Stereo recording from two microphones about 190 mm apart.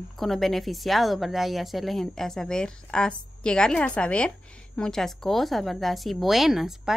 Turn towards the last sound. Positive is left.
turn(degrees=0)  # may be behind; listen again after turning